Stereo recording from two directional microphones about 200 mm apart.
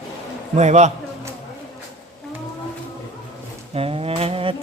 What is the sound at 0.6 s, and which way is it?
Speech, 35° right (ahead or behind).